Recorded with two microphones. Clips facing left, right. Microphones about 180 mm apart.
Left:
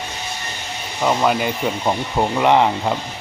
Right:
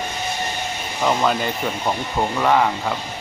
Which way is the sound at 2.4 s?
20° left (ahead or behind).